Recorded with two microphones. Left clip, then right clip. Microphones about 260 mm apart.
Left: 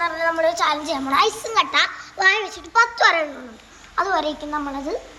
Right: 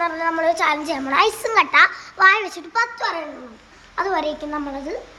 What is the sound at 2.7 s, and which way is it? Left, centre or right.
A child's voice, centre.